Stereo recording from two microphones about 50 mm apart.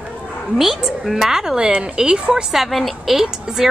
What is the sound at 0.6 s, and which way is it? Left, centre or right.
Speech, centre.